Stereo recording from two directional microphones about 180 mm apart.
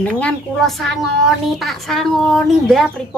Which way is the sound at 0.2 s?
Centre (ahead or behind).